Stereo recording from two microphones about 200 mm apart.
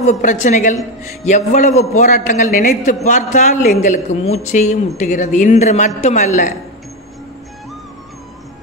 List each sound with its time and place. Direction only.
0.0 s a man's voice: 35° left (ahead or behind)